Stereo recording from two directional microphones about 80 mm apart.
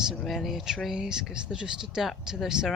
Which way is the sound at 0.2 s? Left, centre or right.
Centre.